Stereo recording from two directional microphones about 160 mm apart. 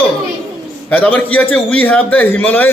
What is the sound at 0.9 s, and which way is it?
A man's voice, 10° left (ahead or behind).